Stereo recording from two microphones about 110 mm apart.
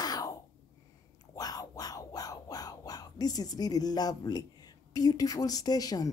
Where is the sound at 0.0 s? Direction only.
35° left (ahead or behind).